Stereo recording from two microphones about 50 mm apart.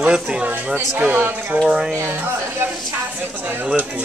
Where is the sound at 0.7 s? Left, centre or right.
Right.